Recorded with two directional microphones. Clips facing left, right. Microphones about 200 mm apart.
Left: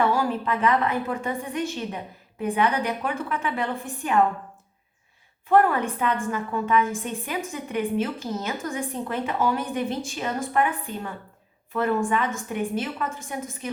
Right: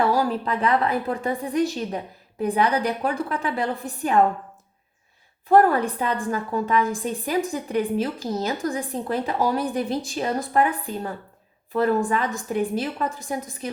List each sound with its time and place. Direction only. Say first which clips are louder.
0.0 s a woman's voice: right 2 dB; 35° right (ahead or behind)
5.5 s a woman's voice: right 3 dB; 35° right (ahead or behind)